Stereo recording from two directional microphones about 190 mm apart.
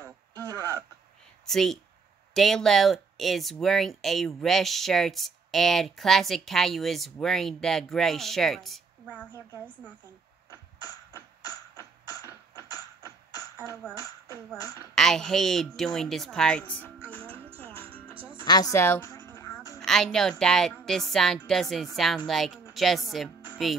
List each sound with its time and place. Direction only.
0.0 s radio: 15° right (ahead or behind)
1.4 s speech: centre (ahead or behind)
10.5 s music: 20° left (ahead or behind)
12.6 s a sound: 20° left (ahead or behind)
15.0 s speech: centre (ahead or behind)
17.8 s music: 30° right (ahead or behind)
18.5 s music: 20° left (ahead or behind)
19.8 s speech: 5° left (ahead or behind)